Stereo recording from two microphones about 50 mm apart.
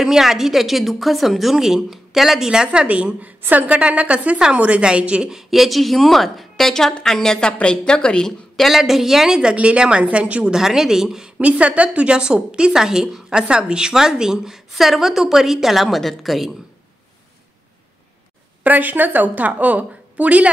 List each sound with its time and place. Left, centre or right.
0.0 s a woman's voice: centre
2.5 s a woman's voice: centre
5.3 s a woman's voice: centre
8.5 s a woman's voice: centre; by 10.5 s right
10.5 s a woman's voice: centre
11.2 s a woman's voice: right; by 16.5 s centre
18.6 s a woman's voice: right